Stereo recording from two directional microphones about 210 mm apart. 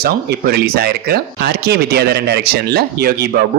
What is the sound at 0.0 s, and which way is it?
Speech, 45° right (ahead or behind).